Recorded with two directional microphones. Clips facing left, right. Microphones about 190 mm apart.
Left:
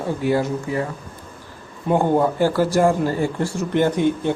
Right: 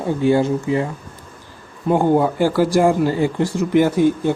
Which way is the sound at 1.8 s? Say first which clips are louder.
Right 2 dB; 10° right (ahead or behind).